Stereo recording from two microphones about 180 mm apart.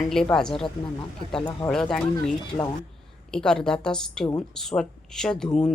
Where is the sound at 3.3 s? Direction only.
5° left (ahead or behind).